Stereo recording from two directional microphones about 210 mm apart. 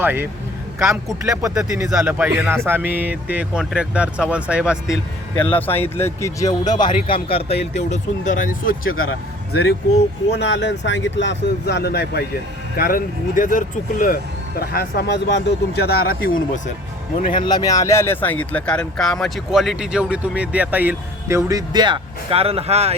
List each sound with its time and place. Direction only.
0.0 s a man's voice: 10° right (ahead or behind)
5.4 s speech: 10° left (ahead or behind); by 16.3 s 45° left (ahead or behind)
17.2 s speech: 20° left (ahead or behind); by 23.0 s 30° right (ahead or behind)